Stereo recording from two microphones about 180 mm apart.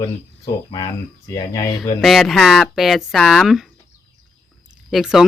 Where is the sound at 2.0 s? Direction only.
Centre (ahead or behind).